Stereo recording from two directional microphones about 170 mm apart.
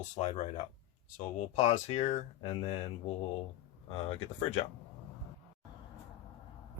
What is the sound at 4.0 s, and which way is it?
Speech, 40° left (ahead or behind).